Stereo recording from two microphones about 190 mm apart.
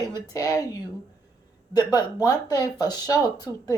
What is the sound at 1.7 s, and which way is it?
A woman's voice, 20° left (ahead or behind).